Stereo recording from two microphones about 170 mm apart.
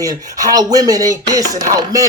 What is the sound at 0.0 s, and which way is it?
Speech, 20° right (ahead or behind).